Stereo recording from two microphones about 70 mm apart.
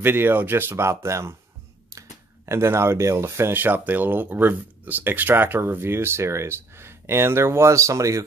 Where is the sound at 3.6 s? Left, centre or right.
Right.